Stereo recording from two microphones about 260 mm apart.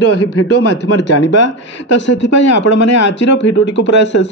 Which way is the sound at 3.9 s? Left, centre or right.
Left.